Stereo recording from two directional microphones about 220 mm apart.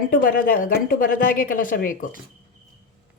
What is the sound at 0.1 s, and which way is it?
Speech, 40° left (ahead or behind).